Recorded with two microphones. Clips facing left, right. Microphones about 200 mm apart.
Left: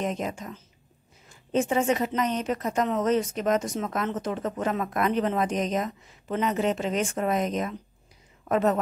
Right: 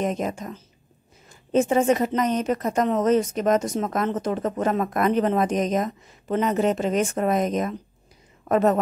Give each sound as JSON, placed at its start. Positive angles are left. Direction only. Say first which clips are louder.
{"t": 0.0, "sound": "a woman's voice", "louder": "right 4 dB", "side_deg": -45}